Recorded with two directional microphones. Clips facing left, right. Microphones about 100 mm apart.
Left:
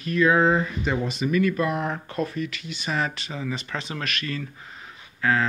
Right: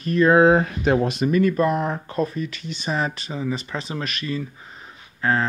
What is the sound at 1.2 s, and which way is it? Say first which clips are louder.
Speech: right 1 dB; 35° right (ahead or behind).